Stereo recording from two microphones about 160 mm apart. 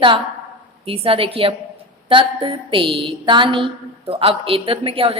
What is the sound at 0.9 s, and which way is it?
A woman's voice, 35° right (ahead or behind).